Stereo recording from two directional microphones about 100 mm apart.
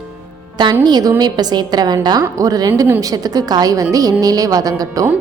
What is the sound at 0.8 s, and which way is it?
A woman's voice, 45° right (ahead or behind).